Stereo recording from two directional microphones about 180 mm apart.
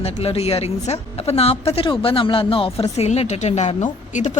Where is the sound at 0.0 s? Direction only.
35° left (ahead or behind).